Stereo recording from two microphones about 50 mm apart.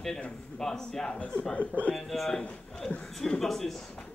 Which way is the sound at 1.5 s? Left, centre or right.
Left.